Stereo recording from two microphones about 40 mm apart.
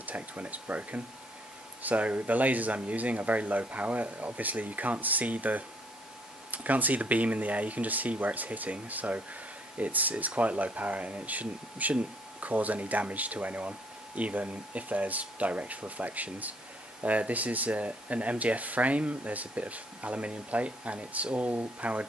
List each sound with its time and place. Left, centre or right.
0.0 s speech: right